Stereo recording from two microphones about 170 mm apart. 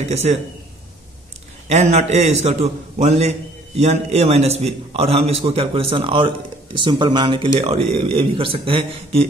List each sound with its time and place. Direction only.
0.0 s a man's voice: 40° right (ahead or behind)
1.7 s a man's voice: 40° right (ahead or behind)